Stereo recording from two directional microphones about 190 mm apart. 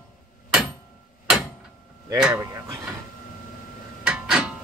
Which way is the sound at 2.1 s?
5° right (ahead or behind).